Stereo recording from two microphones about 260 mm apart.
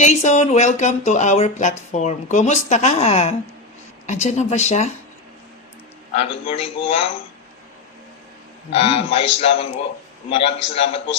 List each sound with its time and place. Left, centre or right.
0.0 s speech: left
6.1 s speech: centre
8.7 s speech: left